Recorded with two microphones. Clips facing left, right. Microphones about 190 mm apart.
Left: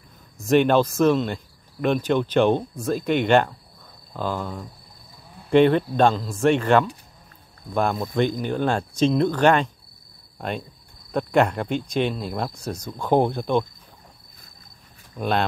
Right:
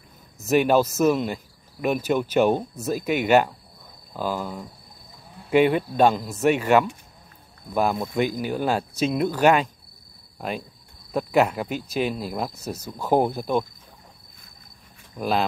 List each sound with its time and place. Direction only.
0.5 s speech: 5° right (ahead or behind)
11.1 s speech: 5° right (ahead or behind)
15.1 s speech: 5° right (ahead or behind)